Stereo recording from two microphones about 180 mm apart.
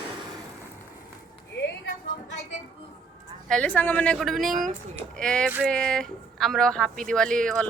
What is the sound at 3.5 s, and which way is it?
Speech, 5° left (ahead or behind).